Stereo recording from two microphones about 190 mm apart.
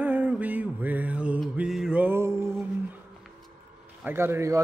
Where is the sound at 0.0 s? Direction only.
10° right (ahead or behind).